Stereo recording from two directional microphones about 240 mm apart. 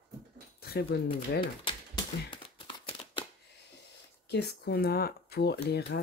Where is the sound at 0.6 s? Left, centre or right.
Left.